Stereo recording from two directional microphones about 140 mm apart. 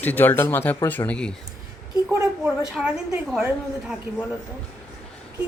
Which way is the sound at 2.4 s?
5° right (ahead or behind).